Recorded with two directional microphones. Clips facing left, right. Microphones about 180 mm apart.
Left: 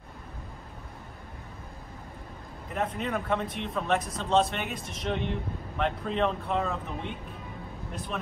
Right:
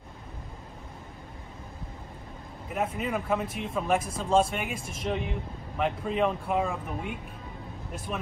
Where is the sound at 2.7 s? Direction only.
10° right (ahead or behind).